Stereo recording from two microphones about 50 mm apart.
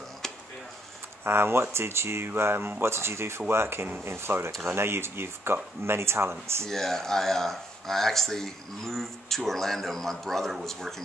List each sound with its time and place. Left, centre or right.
1.2 s speech: right
6.6 s a man's voice: centre